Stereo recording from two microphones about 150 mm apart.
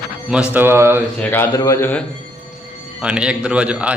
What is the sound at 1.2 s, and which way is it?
Speech, 15° left (ahead or behind).